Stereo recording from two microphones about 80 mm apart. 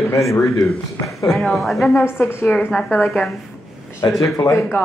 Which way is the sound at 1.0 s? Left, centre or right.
Centre.